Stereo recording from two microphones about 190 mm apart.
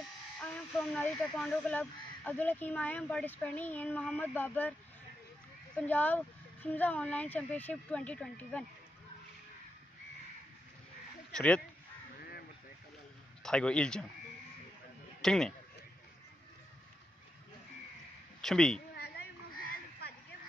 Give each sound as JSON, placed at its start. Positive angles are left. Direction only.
{"t": 0.0, "sound": "speech", "side_deg": 5}
{"t": 5.8, "sound": "speech", "side_deg": 10}
{"t": 11.3, "sound": "speech", "side_deg": 5}
{"t": 12.2, "sound": "honk", "side_deg": 55}
{"t": 13.4, "sound": "a man's voice", "side_deg": 5}
{"t": 15.2, "sound": "speech", "side_deg": 5}
{"t": 18.4, "sound": "a woman's voice", "side_deg": 5}
{"t": 18.9, "sound": "a sound", "side_deg": 55}